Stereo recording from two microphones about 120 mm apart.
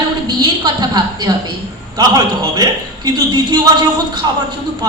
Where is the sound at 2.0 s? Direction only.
35° right (ahead or behind).